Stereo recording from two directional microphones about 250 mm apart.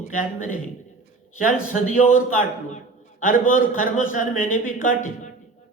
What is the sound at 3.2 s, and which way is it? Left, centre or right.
A man's voice, left.